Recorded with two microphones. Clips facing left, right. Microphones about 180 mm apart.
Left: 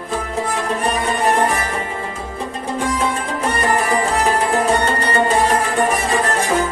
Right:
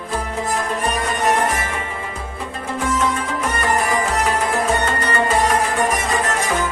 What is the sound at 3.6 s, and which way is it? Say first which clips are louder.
Music: left 2 dB; 35° left (ahead or behind).